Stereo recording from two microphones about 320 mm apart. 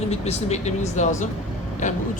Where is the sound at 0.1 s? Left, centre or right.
Centre.